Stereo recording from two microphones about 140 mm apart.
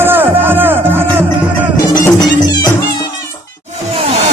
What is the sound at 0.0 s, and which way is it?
Music, 15° right (ahead or behind).